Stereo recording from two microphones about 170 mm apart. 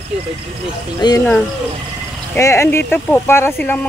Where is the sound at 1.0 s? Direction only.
25° left (ahead or behind).